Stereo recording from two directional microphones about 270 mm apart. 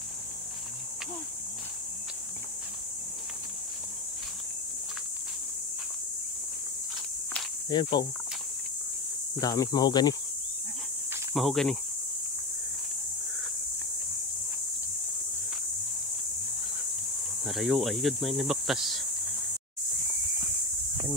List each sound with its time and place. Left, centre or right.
7.7 s speech: centre
9.4 s speech: centre
11.3 s speech: centre
17.5 s speech: centre